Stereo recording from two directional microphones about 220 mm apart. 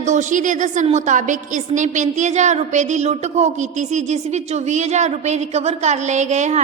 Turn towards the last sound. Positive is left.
turn(degrees=-30)  # may be behind; listen again after turning